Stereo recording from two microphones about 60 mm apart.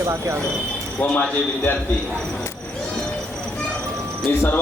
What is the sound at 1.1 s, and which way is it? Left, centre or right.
Speech, left.